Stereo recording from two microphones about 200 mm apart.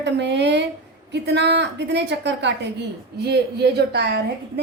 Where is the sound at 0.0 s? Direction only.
60° right (ahead or behind).